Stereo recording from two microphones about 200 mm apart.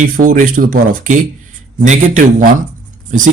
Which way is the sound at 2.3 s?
40° right (ahead or behind).